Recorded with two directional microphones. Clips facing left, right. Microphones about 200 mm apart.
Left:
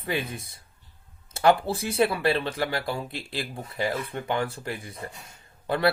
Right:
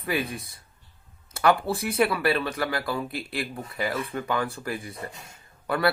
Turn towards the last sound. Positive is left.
turn(degrees=25)  # may be behind; listen again after turning